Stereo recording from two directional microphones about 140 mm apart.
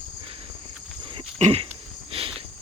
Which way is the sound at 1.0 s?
40° right (ahead or behind).